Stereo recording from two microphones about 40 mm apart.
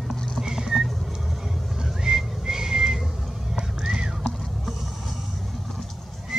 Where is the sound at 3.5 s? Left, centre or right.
Centre.